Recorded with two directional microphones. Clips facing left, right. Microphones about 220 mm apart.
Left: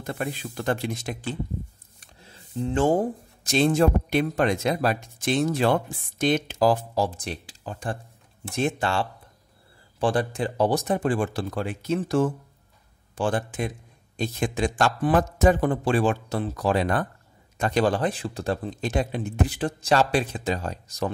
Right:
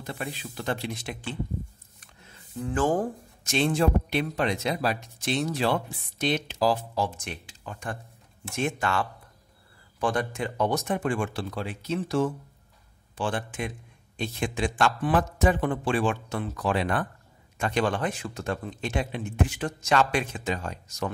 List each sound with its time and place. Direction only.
0.0 s speech: 50° left (ahead or behind)
2.0 s a sound: 30° left (ahead or behind)
3.4 s speech: 40° left (ahead or behind)
7.1 s speech: 35° left (ahead or behind)